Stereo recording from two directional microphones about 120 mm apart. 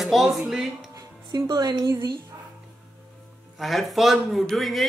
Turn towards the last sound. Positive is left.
turn(degrees=0)  # may be behind; listen again after turning